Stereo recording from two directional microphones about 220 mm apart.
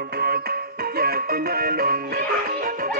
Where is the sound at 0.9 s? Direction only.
45° right (ahead or behind).